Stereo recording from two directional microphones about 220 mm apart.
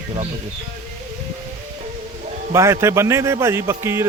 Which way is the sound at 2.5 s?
10° right (ahead or behind).